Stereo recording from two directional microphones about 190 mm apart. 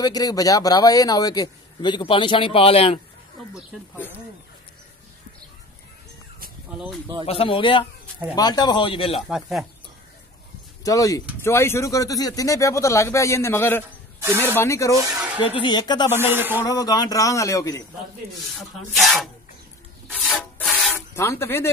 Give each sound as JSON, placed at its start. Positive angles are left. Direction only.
{"t": 0.0, "sound": "a man's voice", "side_deg": 20}
{"t": 7.2, "sound": "a man's voice", "side_deg": 30}
{"t": 9.3, "sound": "rub", "side_deg": 0}
{"t": 10.8, "sound": "a man's voice", "side_deg": 15}
{"t": 16.2, "sound": "speech", "side_deg": -10}
{"t": 16.6, "sound": "a man's voice", "side_deg": 20}
{"t": 18.6, "sound": "rub", "side_deg": 0}
{"t": 20.9, "sound": "speech", "side_deg": 15}